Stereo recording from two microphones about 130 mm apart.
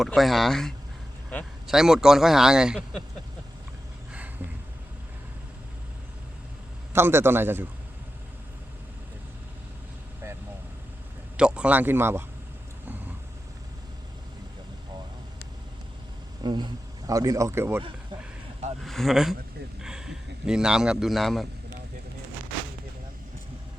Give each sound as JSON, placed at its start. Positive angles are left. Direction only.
{"t": 0.0, "sound": "speech", "side_deg": 0}
{"t": 6.9, "sound": "speech", "side_deg": -20}
{"t": 11.3, "sound": "speech", "side_deg": -5}
{"t": 16.4, "sound": "speech", "side_deg": -35}
{"t": 18.8, "sound": "a man's voice", "side_deg": 0}